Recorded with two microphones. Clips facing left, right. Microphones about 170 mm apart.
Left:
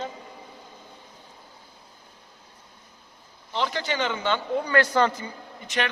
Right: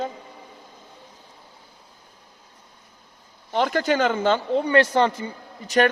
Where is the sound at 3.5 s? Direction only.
50° right (ahead or behind).